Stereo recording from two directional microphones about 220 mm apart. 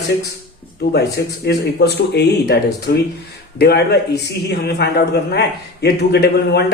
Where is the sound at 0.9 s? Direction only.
45° left (ahead or behind).